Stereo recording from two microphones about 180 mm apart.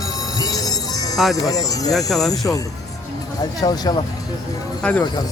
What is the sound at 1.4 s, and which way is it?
Speech, 20° left (ahead or behind).